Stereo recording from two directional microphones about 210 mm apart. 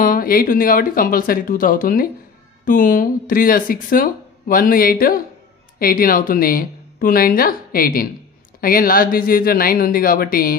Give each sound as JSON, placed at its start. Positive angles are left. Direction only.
{"t": 0.0, "sound": "speech", "side_deg": 40}